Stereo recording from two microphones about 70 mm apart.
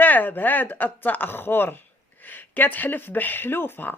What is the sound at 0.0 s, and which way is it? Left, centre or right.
A man's voice, left.